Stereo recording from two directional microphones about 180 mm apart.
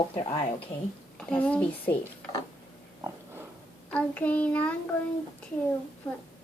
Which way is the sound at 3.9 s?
10° left (ahead or behind).